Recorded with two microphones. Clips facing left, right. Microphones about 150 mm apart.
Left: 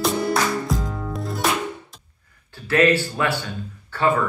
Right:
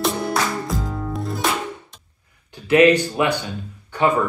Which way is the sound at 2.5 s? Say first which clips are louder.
Right 4 dB; 15° right (ahead or behind).